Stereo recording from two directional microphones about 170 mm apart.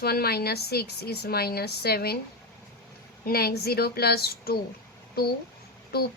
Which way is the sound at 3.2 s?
65° left (ahead or behind).